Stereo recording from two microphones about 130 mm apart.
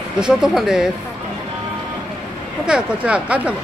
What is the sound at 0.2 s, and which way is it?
Speech, 5° right (ahead or behind).